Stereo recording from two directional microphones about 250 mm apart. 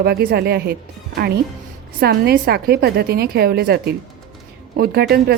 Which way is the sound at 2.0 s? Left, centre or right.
Right.